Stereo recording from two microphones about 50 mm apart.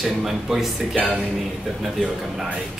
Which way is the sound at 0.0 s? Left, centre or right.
Centre.